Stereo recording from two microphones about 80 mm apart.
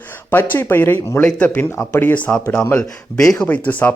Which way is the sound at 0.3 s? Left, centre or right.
Left.